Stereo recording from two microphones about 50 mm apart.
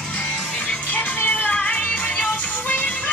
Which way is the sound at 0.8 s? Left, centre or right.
Left.